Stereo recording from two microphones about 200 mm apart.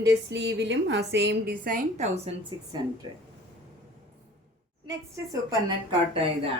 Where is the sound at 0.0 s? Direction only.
60° right (ahead or behind).